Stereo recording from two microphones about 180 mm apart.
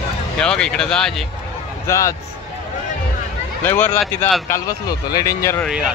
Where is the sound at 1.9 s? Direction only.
15° left (ahead or behind).